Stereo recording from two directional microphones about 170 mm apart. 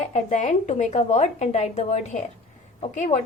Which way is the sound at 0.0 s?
45° left (ahead or behind).